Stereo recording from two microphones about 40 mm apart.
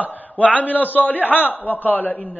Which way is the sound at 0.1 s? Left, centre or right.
Left.